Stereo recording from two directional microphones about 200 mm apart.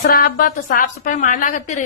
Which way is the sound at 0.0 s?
45° left (ahead or behind).